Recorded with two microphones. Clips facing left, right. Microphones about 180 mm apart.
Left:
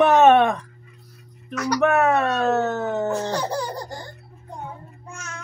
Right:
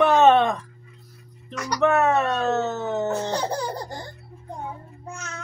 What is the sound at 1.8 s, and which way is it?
Speech, 15° left (ahead or behind).